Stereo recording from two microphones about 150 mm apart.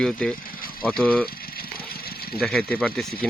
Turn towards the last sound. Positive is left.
turn(degrees=5)  # may be behind; listen again after turning